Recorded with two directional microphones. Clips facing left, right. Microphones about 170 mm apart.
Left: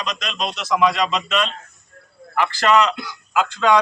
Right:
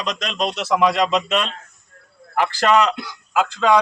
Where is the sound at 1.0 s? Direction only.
45° right (ahead or behind).